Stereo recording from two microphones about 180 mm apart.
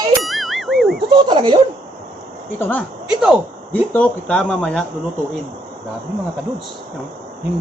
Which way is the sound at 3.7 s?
10° left (ahead or behind).